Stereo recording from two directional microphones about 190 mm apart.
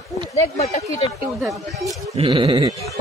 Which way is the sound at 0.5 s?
35° left (ahead or behind).